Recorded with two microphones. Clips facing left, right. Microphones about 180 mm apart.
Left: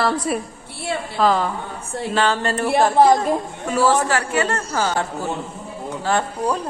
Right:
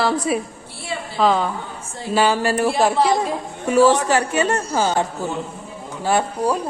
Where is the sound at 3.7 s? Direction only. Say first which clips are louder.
Right 3 dB; 15° right (ahead or behind).